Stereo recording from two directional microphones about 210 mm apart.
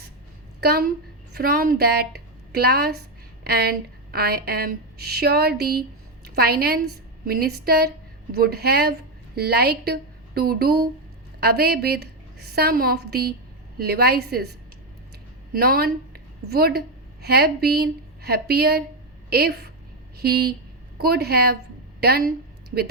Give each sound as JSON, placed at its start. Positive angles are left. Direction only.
{"t": 0.6, "sound": "a woman's voice", "side_deg": -45}
{"t": 15.5, "sound": "a woman's voice", "side_deg": -45}